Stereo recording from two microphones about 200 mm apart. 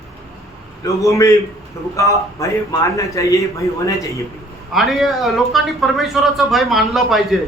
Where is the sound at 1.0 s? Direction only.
15° left (ahead or behind).